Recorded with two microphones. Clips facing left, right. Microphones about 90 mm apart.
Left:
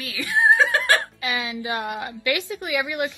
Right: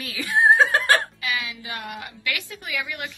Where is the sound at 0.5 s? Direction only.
35° right (ahead or behind).